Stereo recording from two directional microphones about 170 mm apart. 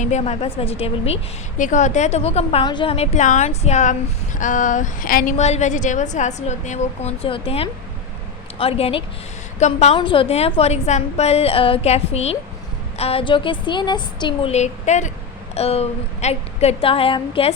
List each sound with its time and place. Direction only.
0.0 s a woman's voice: 40° left (ahead or behind)
5.4 s a woman's voice: 40° left (ahead or behind)
10.0 s a woman's voice: 30° left (ahead or behind)
14.5 s a woman's voice: 45° left (ahead or behind)